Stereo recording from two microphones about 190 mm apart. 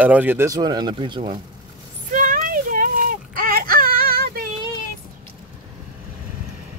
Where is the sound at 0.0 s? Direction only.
10° right (ahead or behind); by 1.4 s 25° right (ahead or behind).